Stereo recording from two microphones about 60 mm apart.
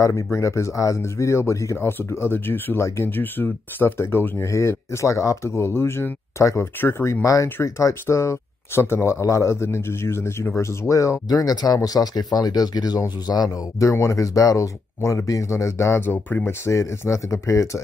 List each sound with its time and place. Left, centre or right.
0.0 s speech: left
1.9 s speech: left
4.5 s speech: left
6.4 s speech: left
13.4 s speech: left
15.0 s speech: left
16.1 s speech: left
16.6 s speech: left